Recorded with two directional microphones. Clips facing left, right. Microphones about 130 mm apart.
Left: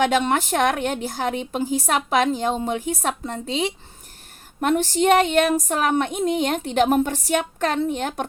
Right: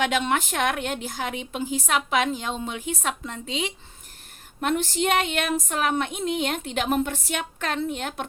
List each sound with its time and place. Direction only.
0.0 s a woman's voice: 40° left (ahead or behind)